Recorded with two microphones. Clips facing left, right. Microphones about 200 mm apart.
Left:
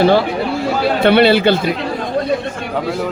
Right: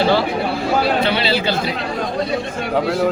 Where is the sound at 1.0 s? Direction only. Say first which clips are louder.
Left 8 dB; 55° left (ahead or behind).